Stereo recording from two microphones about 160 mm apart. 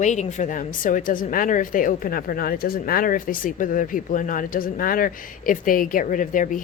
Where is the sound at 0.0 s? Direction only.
50° left (ahead or behind).